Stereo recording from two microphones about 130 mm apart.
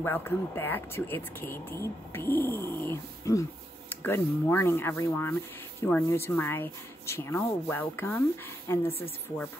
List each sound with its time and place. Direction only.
0.0 s speech: 15° left (ahead or behind)